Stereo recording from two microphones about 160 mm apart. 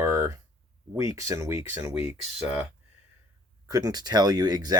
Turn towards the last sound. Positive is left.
turn(degrees=-25)  # may be behind; listen again after turning